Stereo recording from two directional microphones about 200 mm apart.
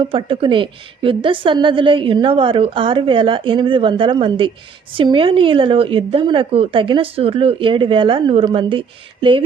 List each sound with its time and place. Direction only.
0.0 s a woman's voice: 25° right (ahead or behind)